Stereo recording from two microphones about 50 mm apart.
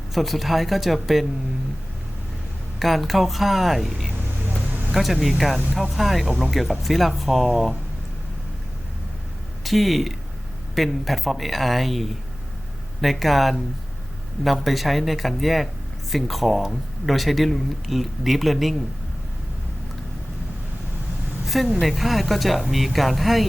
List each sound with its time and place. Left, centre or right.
0.1 s speech: centre
2.7 s speech: centre
9.6 s speech: centre
21.4 s a sound: centre
21.8 s speech: centre